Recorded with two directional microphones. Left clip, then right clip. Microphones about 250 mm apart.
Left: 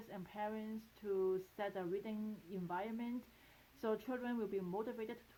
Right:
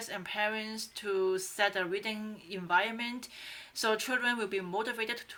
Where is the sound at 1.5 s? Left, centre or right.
Centre.